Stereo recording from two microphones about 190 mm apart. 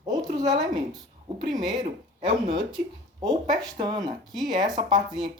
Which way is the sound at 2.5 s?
25° right (ahead or behind).